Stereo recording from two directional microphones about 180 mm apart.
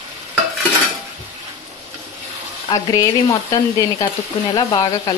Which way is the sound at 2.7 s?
20° left (ahead or behind).